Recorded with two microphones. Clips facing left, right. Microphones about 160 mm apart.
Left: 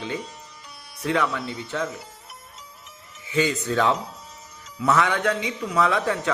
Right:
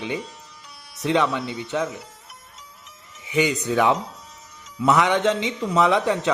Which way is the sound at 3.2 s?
15° right (ahead or behind).